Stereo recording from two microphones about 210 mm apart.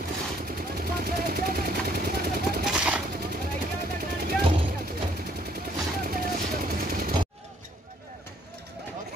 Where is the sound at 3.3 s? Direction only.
45° right (ahead or behind).